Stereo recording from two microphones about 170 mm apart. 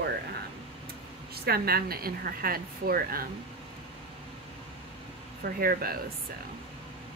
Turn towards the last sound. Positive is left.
turn(degrees=-60)  # may be behind; listen again after turning